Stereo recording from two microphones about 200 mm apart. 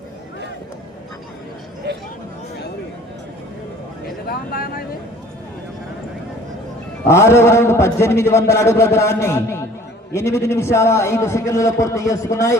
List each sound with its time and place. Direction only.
4.3 s speech: 50° left (ahead or behind)
7.1 s a man's voice: 15° left (ahead or behind)